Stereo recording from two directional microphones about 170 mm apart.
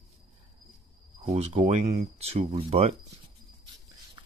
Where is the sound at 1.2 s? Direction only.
40° right (ahead or behind).